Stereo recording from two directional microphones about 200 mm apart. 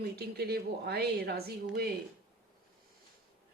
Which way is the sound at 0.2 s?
55° right (ahead or behind).